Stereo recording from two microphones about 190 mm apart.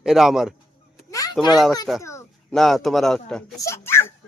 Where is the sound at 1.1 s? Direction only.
20° left (ahead or behind).